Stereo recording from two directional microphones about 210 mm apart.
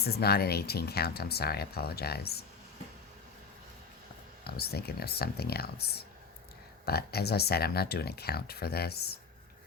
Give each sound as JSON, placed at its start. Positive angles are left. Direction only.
{"t": 0.0, "sound": "speech", "side_deg": 50}
{"t": 4.4, "sound": "speech", "side_deg": 50}